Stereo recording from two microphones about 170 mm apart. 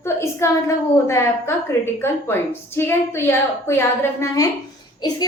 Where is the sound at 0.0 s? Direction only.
15° left (ahead or behind).